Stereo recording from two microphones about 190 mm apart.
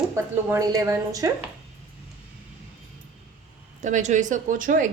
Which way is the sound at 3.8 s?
40° right (ahead or behind).